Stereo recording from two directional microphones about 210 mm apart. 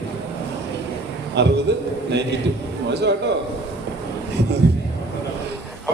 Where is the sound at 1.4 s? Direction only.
55° right (ahead or behind).